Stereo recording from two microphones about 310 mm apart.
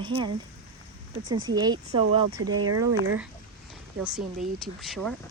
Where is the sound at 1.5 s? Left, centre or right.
Centre.